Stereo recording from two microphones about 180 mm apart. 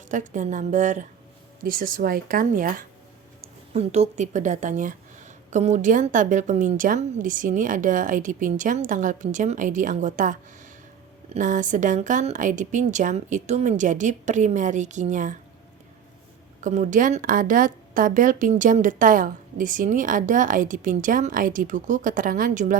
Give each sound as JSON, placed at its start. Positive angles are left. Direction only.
{"t": 0.1, "sound": "a woman's voice", "side_deg": -45}
{"t": 3.8, "sound": "a woman's voice", "side_deg": -35}
{"t": 16.6, "sound": "a woman's voice", "side_deg": -45}